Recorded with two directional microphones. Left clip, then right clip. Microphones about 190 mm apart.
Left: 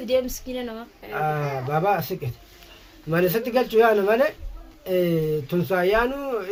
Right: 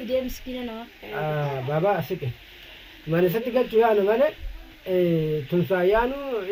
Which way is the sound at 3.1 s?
30° left (ahead or behind).